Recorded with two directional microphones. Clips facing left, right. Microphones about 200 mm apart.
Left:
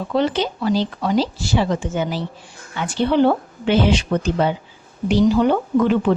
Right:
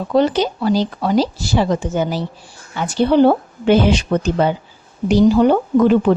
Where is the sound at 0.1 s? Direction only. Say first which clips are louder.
Right 5 dB; 40° right (ahead or behind).